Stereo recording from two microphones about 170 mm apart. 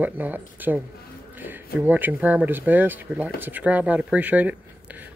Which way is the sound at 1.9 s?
10° right (ahead or behind).